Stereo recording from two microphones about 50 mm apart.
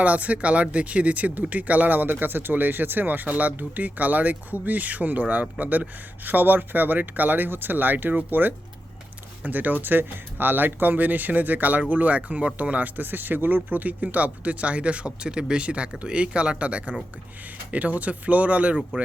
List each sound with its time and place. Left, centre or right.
0.0 s speech: right